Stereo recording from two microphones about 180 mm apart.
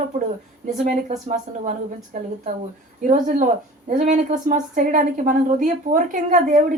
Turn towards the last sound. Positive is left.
turn(degrees=-45)  # may be behind; listen again after turning